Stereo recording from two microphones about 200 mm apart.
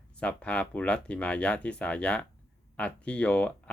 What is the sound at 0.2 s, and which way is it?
Speech, 5° left (ahead or behind).